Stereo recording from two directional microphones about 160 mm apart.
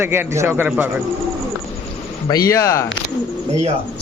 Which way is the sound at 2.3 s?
20° left (ahead or behind).